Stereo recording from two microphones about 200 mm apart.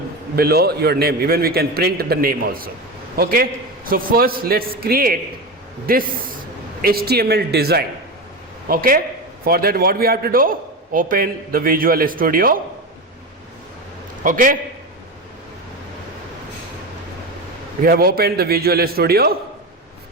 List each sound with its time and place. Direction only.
0.3 s a man's voice: 50° right (ahead or behind)
14.3 s a man's voice: 40° right (ahead or behind)
17.8 s a man's voice: 50° right (ahead or behind)